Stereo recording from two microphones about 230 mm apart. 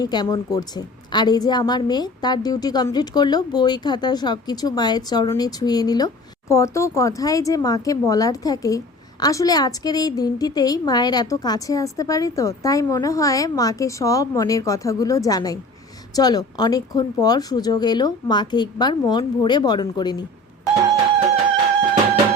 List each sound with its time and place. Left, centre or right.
0.0 s a woman's voice: centre